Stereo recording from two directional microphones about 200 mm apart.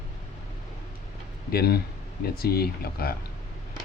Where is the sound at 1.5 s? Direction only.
50° left (ahead or behind).